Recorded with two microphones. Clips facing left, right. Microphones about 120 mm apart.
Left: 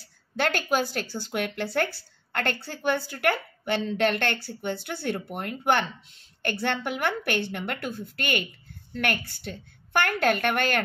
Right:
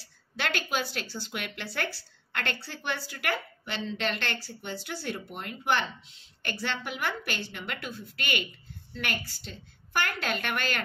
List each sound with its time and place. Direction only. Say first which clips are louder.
0.0 s a woman's voice: left 7 dB; 45° left (ahead or behind)